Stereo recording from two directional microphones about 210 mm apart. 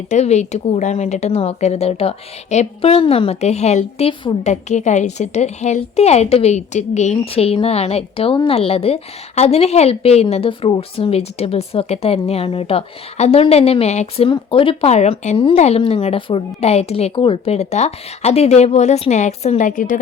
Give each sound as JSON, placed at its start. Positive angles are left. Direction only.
{"t": 0.1, "sound": "speech", "side_deg": 35}